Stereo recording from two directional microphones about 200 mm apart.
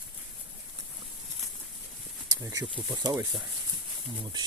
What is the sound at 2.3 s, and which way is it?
Speech, 20° right (ahead or behind).